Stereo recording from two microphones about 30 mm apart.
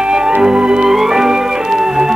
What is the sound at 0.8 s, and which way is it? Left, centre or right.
Music, centre.